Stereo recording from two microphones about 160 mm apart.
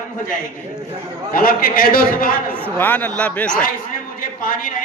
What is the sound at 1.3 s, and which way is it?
A man's voice, 65° left (ahead or behind).